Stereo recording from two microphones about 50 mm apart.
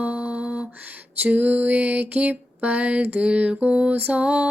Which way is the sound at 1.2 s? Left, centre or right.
Right.